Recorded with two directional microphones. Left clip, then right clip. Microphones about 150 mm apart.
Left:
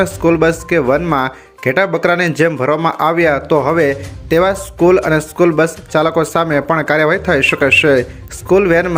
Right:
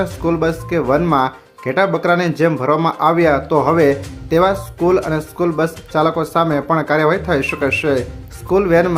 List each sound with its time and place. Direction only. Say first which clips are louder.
0.0 s speech: left 5 dB; 20° left (ahead or behind)